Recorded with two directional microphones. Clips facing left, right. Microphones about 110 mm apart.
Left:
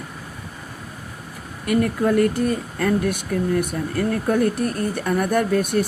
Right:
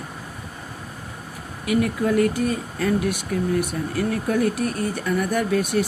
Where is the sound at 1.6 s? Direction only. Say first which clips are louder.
Left 2 dB; 50° left (ahead or behind).